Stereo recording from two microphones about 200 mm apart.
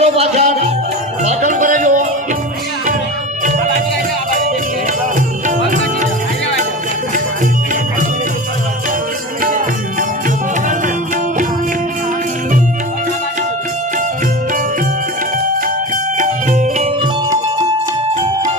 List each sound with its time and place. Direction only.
0.0 s music: 35° right (ahead or behind)
5.5 s music: 40° right (ahead or behind)
9.4 s music: 40° right (ahead or behind)
16.1 s music: 40° right (ahead or behind)